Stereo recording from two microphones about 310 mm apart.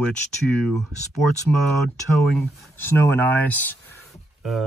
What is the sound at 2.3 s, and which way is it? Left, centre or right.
Speech, centre.